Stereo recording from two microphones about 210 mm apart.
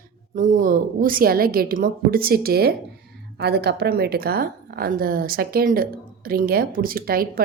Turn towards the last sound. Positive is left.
turn(degrees=-45)  # may be behind; listen again after turning